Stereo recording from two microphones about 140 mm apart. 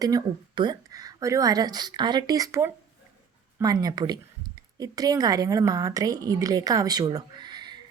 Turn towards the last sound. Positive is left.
turn(degrees=-30)  # may be behind; listen again after turning